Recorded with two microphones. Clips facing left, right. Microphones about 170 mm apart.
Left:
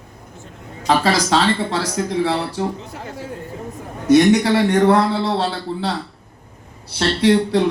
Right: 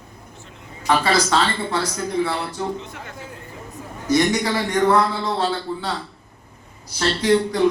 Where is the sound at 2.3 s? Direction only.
35° left (ahead or behind).